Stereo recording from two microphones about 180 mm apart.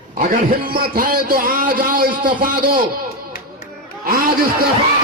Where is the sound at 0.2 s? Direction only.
50° right (ahead or behind).